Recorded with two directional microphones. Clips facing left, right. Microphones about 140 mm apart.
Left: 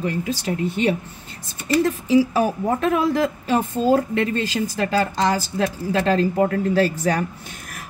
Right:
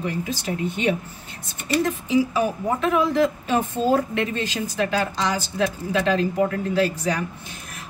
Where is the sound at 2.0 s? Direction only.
40° left (ahead or behind).